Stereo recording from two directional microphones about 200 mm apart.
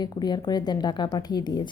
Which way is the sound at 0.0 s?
20° left (ahead or behind).